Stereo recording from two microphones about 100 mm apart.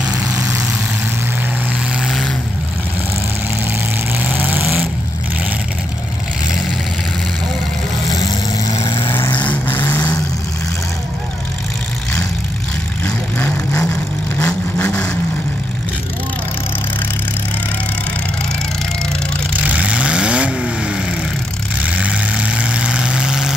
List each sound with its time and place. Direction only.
0.0 s vehicle: 10° right (ahead or behind)
2.0 s vehicle: centre (ahead or behind)
4.2 s vehicle: 15° right (ahead or behind)
9.1 s vehicle: 25° left (ahead or behind)
13.0 s vehicle: 15° left (ahead or behind)
19.7 s vehicle: 10° right (ahead or behind)